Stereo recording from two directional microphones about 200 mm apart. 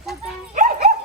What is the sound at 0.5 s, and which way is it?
Dog, 40° right (ahead or behind).